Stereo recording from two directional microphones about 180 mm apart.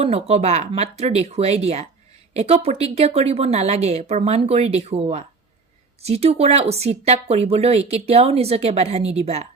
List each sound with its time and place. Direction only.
0.0 s a woman's voice: 35° right (ahead or behind)